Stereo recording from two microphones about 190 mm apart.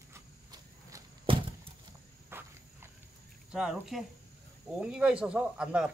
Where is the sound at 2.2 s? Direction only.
10° right (ahead or behind).